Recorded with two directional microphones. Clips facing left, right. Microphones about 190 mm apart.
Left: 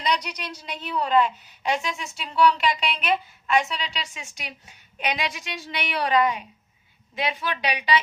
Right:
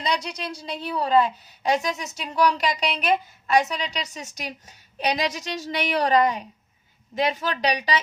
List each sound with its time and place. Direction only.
0.0 s a woman's voice: 30° right (ahead or behind)